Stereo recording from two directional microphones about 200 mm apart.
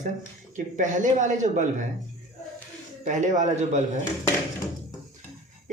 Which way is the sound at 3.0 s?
35° right (ahead or behind).